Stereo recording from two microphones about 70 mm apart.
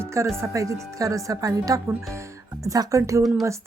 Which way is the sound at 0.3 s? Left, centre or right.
Right.